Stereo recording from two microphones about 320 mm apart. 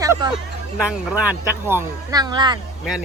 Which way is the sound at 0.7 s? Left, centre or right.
Centre.